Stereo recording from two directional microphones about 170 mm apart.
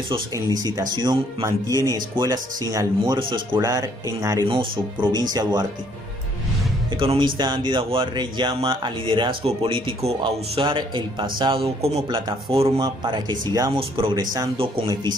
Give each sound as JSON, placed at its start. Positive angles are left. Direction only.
{"t": 0.1, "sound": "speech", "side_deg": -25}
{"t": 7.0, "sound": "speech", "side_deg": -30}
{"t": 12.7, "sound": "speech", "side_deg": -25}